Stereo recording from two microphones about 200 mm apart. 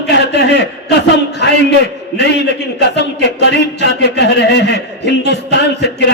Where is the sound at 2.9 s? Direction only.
60° left (ahead or behind).